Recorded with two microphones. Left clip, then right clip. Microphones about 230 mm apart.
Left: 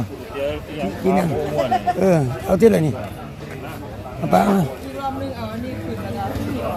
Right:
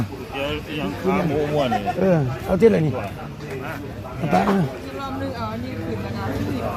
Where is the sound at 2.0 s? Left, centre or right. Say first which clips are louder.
Left 2 dB; centre.